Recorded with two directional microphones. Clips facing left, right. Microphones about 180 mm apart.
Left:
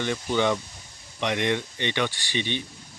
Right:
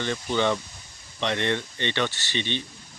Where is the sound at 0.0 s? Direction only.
15° left (ahead or behind).